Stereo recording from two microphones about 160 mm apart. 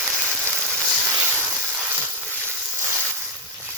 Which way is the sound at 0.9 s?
10° right (ahead or behind).